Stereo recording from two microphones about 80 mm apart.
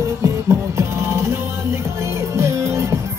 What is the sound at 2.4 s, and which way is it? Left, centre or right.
Music, right.